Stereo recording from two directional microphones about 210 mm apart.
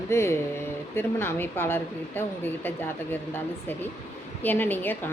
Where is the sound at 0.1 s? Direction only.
15° left (ahead or behind).